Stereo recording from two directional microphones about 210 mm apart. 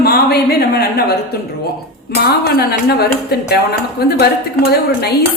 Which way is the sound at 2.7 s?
50° left (ahead or behind).